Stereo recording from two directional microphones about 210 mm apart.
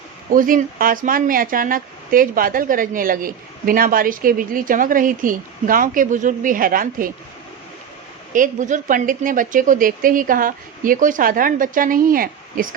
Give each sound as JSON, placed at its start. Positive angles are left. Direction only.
{"t": 0.3, "sound": "speech", "side_deg": -40}
{"t": 8.3, "sound": "speech", "side_deg": -40}